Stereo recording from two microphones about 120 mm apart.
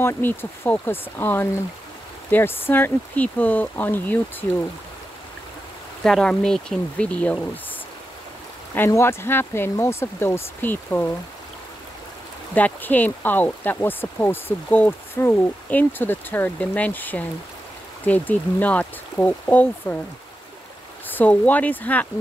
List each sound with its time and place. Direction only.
0.0 s speech: 20° left (ahead or behind)
6.0 s speech: 5° left (ahead or behind)
8.7 s speech: 20° left (ahead or behind)
12.5 s speech: 15° left (ahead or behind)
21.1 s speech: 15° left (ahead or behind)